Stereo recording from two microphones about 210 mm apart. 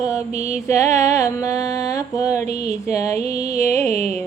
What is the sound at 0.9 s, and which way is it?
Music, 15° left (ahead or behind).